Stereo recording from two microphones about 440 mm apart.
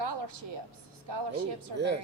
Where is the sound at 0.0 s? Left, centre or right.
Right.